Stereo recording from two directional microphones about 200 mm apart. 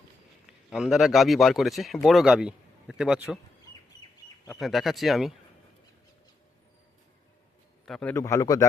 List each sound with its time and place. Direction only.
0.4 s a man's voice: 5° right (ahead or behind)
4.6 s speech: centre (ahead or behind)
7.9 s a man's voice: 5° left (ahead or behind)
8.1 s speech: 15° left (ahead or behind)